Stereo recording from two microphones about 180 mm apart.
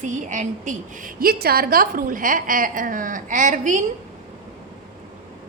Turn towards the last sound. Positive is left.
turn(degrees=-45)  # may be behind; listen again after turning